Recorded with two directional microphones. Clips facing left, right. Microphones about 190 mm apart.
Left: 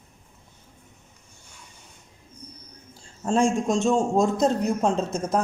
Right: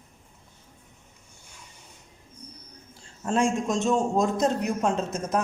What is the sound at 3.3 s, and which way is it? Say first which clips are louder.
A man's voice: left 3 dB; 30° left (ahead or behind).